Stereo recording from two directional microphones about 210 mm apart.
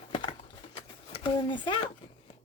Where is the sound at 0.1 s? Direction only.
20° left (ahead or behind).